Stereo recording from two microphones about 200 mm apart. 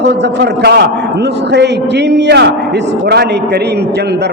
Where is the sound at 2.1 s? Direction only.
60° right (ahead or behind).